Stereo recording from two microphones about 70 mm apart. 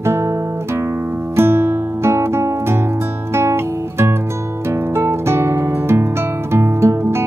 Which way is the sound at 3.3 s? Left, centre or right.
Right.